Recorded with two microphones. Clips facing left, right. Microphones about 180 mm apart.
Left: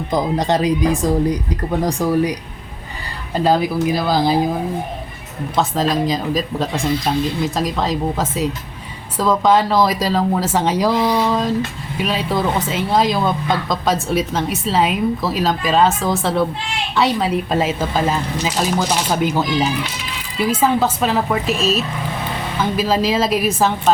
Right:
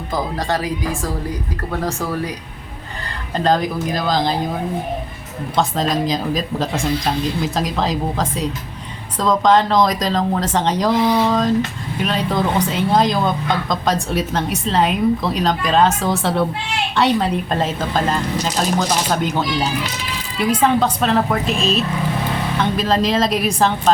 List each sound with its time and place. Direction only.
0.1 s speech: 20° left (ahead or behind)
3.3 s speech: 10° left (ahead or behind)
5.5 s speech: centre (ahead or behind)